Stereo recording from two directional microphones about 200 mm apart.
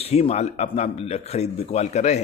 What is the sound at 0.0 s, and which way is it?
Speech, 30° left (ahead or behind).